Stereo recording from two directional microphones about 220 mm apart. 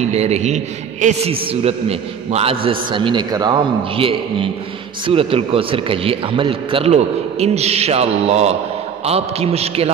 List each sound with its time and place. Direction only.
0.0 s speech: 30° right (ahead or behind)